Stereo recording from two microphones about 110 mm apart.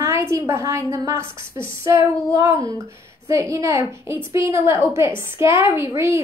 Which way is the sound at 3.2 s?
30° right (ahead or behind).